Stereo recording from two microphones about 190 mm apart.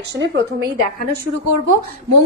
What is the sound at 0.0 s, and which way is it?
A woman's voice, 65° right (ahead or behind).